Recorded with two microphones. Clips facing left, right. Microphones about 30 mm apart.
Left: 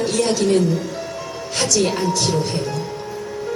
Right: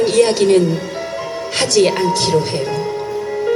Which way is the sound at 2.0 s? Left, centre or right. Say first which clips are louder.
Right 4 dB; right.